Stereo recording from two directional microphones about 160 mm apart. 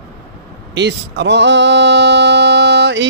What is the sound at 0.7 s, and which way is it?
Male singing, 90° right.